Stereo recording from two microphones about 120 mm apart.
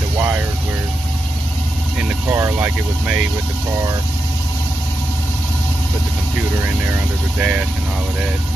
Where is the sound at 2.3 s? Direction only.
20° right (ahead or behind).